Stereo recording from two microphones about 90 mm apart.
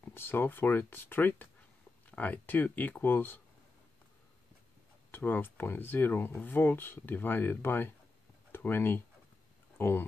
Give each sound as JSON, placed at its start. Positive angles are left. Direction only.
{"t": 0.0, "sound": "speech", "side_deg": 25}
{"t": 5.1, "sound": "speech", "side_deg": 20}